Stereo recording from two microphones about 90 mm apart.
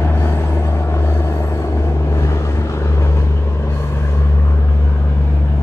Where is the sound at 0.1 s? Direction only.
25° left (ahead or behind).